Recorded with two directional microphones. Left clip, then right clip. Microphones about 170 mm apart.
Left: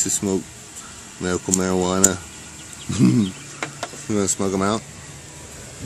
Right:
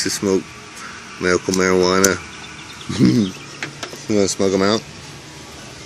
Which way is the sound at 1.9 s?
20° left (ahead or behind).